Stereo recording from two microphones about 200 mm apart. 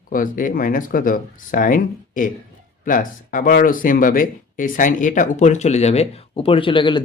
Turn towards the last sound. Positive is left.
turn(degrees=25)  # may be behind; listen again after turning